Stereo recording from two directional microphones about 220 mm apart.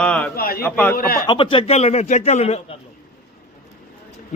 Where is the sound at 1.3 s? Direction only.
25° left (ahead or behind).